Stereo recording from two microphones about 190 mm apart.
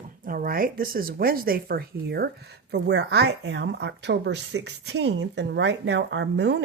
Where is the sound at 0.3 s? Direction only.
50° right (ahead or behind).